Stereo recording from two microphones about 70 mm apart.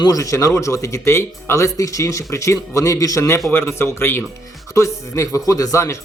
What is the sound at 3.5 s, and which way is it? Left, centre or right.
Speech, left.